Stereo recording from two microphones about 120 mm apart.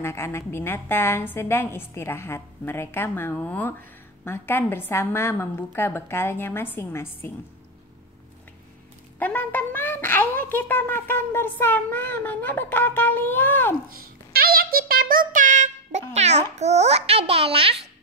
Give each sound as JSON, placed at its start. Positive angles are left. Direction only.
{"t": 0.0, "sound": "a woman's voice", "side_deg": 20}
{"t": 9.2, "sound": "a child's voice", "side_deg": 15}
{"t": 15.3, "sound": "a sound", "side_deg": -90}
{"t": 16.1, "sound": "a child's voice", "side_deg": -70}